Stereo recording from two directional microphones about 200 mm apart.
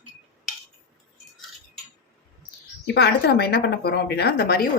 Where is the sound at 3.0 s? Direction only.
55° left (ahead or behind).